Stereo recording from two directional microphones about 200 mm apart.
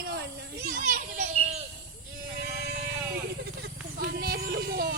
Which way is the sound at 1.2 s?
35° right (ahead or behind).